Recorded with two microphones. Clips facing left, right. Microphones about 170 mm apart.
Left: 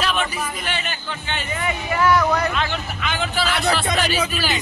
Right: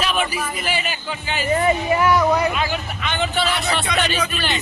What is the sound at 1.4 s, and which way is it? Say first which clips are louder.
Speech: right 10 dB; 35° right (ahead or behind).